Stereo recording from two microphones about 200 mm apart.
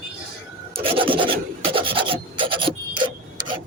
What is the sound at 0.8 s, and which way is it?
Filing, 25° right (ahead or behind).